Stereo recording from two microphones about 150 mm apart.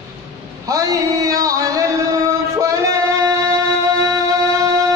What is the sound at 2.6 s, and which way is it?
Music, 20° right (ahead or behind).